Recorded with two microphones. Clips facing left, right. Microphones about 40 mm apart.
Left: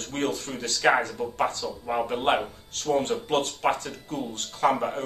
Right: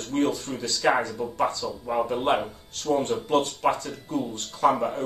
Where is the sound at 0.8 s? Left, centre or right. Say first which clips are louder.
Left 1 dB; left.